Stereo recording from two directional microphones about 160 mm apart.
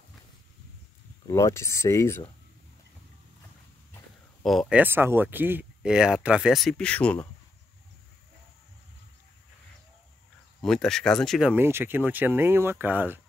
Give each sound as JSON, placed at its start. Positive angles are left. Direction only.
{"t": 1.2, "sound": "speech", "side_deg": 20}
{"t": 4.4, "sound": "speech", "side_deg": 0}
{"t": 10.6, "sound": "speech", "side_deg": 5}
{"t": 11.5, "sound": "speech", "side_deg": -15}